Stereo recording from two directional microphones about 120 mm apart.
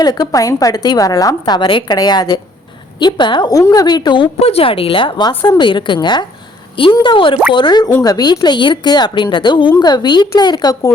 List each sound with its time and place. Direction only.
0.0 s speech: 35° left (ahead or behind)
4.4 s speech: 55° left (ahead or behind); by 10.9 s 30° left (ahead or behind)